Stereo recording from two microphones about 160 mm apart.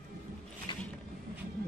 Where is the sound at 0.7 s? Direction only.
30° left (ahead or behind).